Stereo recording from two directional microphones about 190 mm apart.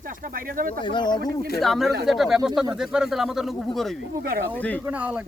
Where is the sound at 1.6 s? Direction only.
Centre (ahead or behind).